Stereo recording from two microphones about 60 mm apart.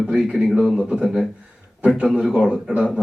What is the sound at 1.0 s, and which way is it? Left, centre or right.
Speech, centre.